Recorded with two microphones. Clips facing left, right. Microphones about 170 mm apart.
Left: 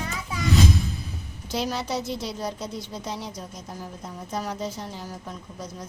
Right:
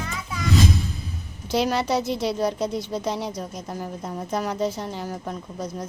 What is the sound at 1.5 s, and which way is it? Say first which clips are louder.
A woman's voice: right 6 dB; 70° right (ahead or behind).